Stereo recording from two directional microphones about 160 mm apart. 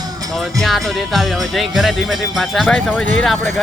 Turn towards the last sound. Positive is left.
turn(degrees=0)  # may be behind; listen again after turning